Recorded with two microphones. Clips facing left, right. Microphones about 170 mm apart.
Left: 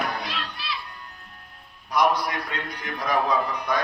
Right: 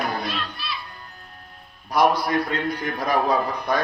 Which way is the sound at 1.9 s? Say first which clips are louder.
Right 3 dB; 30° right (ahead or behind).